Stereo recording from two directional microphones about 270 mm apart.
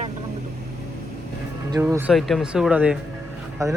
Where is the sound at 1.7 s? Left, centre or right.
Centre.